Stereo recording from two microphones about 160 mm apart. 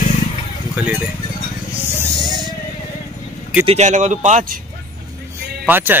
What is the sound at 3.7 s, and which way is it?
Speech, 45° right (ahead or behind).